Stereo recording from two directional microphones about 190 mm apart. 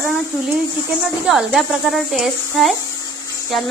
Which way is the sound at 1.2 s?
Centre (ahead or behind).